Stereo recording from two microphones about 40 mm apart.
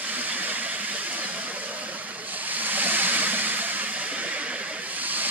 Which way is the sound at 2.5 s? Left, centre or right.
Right.